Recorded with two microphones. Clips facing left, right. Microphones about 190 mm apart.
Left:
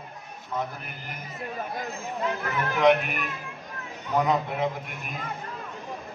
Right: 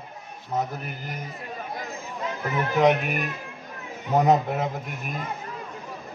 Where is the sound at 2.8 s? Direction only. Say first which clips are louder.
Even; 40° right (ahead or behind).